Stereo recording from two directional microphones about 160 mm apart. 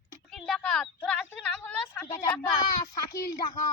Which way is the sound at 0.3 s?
Centre (ahead or behind).